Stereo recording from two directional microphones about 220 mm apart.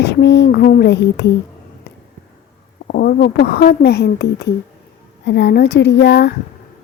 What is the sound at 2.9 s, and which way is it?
Speech, 45° left (ahead or behind).